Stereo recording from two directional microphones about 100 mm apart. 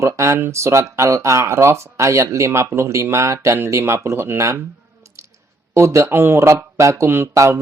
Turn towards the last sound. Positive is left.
turn(degrees=-30)  # may be behind; listen again after turning